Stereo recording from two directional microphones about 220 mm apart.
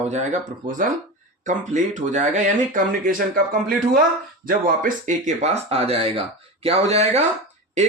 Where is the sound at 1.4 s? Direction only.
35° right (ahead or behind).